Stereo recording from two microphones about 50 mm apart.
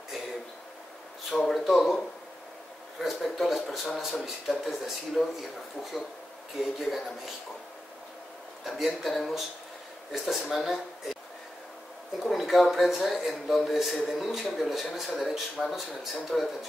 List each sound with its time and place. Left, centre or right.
1.3 s speech: centre
3.0 s speech: centre
6.6 s speech: centre
8.6 s speech: centre
12.2 s speech: centre